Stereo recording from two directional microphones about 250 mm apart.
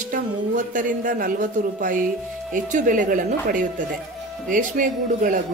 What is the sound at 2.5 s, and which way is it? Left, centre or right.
Speech, right.